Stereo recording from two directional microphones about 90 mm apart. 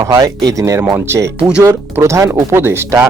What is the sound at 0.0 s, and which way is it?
Speech, 40° right (ahead or behind).